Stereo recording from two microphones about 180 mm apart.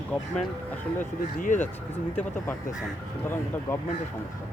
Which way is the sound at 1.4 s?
45° left (ahead or behind).